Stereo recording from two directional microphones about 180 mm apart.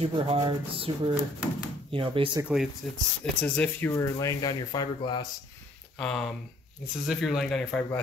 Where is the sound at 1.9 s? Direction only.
30° right (ahead or behind).